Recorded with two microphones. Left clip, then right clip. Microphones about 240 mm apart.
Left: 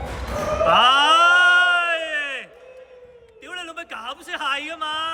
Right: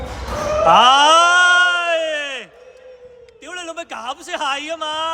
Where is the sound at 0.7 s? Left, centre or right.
Centre.